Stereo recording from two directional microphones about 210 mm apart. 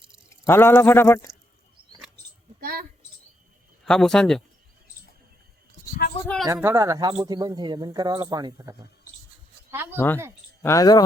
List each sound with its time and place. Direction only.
0.3 s speech: 10° left (ahead or behind)
2.6 s a sound: 45° right (ahead or behind)
3.8 s speech: 5° left (ahead or behind)
6.2 s speech: 5° left (ahead or behind)
6.5 s speech: 10° right (ahead or behind)
9.7 s speech: 10° right (ahead or behind)
10.6 s speech: 15° left (ahead or behind)